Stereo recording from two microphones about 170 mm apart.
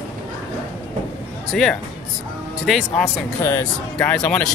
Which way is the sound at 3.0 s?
15° left (ahead or behind).